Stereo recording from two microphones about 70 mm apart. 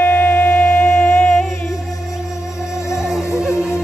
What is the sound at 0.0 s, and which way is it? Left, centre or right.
Music, left.